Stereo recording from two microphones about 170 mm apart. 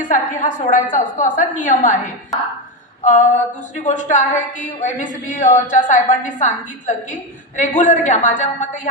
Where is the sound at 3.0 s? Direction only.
50° left (ahead or behind).